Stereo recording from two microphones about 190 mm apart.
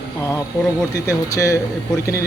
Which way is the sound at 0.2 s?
15° left (ahead or behind).